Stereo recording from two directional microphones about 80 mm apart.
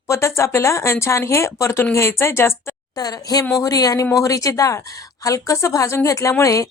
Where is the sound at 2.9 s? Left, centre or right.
Left.